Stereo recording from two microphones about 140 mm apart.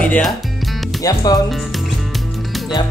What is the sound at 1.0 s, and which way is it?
Speech, 25° left (ahead or behind).